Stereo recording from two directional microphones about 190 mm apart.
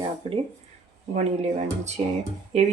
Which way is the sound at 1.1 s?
35° right (ahead or behind).